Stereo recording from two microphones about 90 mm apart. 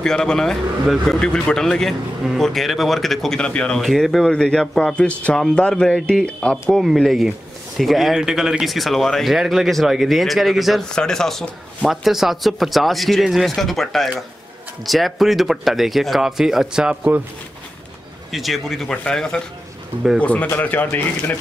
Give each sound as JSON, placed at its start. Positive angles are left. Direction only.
{"t": 0.0, "sound": "speech", "side_deg": 5}
{"t": 3.8, "sound": "a man's voice", "side_deg": 0}
{"t": 18.3, "sound": "a man's voice", "side_deg": 0}